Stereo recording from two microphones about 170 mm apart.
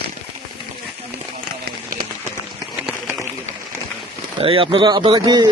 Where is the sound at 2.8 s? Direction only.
5° right (ahead or behind).